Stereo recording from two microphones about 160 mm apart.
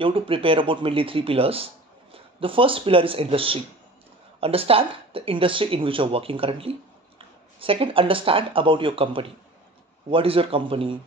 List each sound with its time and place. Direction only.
0.0 s speech: 35° right (ahead or behind)